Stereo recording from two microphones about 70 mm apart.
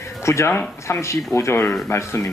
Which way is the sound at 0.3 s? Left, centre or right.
Left.